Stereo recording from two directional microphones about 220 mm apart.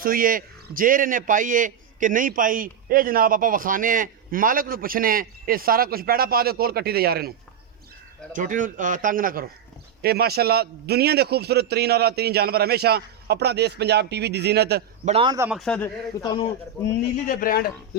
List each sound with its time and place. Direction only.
0.0 s a man's voice: 40° right (ahead or behind)
15.0 s a man's voice: 25° right (ahead or behind)
15.4 s speech: 5° right (ahead or behind)
16.2 s a man's voice: 20° left (ahead or behind)
17.2 s speech: 40° left (ahead or behind)